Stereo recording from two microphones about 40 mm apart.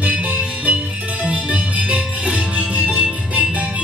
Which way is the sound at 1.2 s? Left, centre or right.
Right.